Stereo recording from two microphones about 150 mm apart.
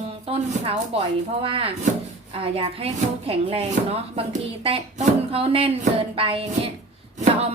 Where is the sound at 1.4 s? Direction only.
35° right (ahead or behind).